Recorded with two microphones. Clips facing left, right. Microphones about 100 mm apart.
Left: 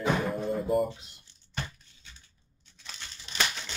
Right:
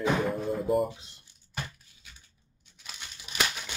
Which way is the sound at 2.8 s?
10° right (ahead or behind).